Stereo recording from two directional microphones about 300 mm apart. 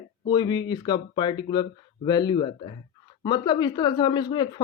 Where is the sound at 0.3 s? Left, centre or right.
Centre.